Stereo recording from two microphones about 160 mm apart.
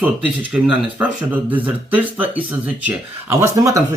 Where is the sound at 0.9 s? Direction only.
10° right (ahead or behind).